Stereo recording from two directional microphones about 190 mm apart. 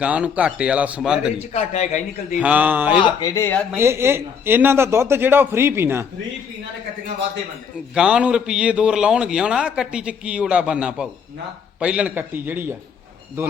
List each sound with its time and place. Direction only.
0.0 s a man's voice: 5° right (ahead or behind)
1.5 s a man's voice: 35° left (ahead or behind)
2.4 s a man's voice: 10° right (ahead or behind)
3.2 s speech: 15° left (ahead or behind)
3.8 s a man's voice: 15° right (ahead or behind)
7.9 s a man's voice: 5° right (ahead or behind)